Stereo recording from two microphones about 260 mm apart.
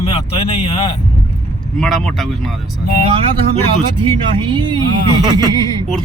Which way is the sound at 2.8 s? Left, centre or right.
Left.